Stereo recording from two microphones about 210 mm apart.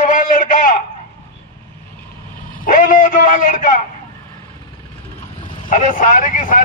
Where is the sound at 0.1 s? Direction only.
40° left (ahead or behind).